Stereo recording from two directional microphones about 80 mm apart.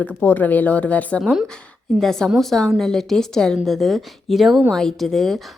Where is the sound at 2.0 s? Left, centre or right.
Centre.